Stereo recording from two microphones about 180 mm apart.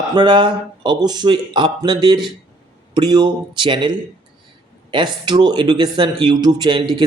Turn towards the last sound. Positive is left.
turn(degrees=-25)  # may be behind; listen again after turning